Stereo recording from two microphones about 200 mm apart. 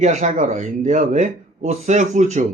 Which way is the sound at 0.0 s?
35° right (ahead or behind).